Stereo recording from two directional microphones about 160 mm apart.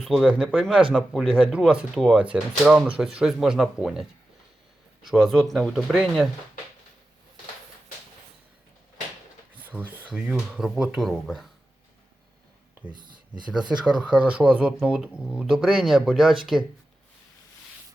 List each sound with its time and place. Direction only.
0.0 s speech: centre (ahead or behind)
5.0 s speech: centre (ahead or behind)
9.6 s a sound: 10° right (ahead or behind)
10.2 s speech: centre (ahead or behind)
12.9 s a sound: 30° right (ahead or behind)
13.5 s speech: 5° right (ahead or behind)